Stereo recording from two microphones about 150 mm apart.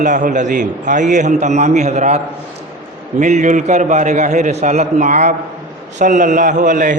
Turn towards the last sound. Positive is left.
turn(degrees=-60)  # may be behind; listen again after turning